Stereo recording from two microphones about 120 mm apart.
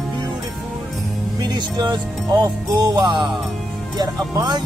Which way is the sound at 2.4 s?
35° right (ahead or behind).